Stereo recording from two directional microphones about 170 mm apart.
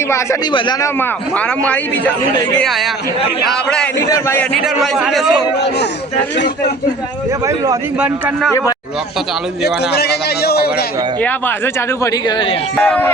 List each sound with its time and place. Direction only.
0.5 s speech: 25° left (ahead or behind)
0.9 s a man's voice: 10° left (ahead or behind)
4.1 s a man's voice: 15° left (ahead or behind)
4.6 s a man's voice: 5° right (ahead or behind)
7.4 s a man's voice: 20° right (ahead or behind)
7.9 s a man's voice: 5° right (ahead or behind)
9.6 s a man's voice: 70° left (ahead or behind)
11.2 s a man's voice: 10° left (ahead or behind)
12.1 s speech: 30° left (ahead or behind)
12.7 s a man's voice: 10° left (ahead or behind)